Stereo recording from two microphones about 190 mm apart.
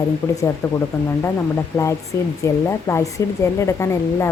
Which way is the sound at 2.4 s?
15° left (ahead or behind).